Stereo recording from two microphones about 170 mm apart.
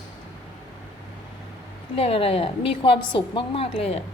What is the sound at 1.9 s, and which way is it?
A woman's voice, 35° left (ahead or behind).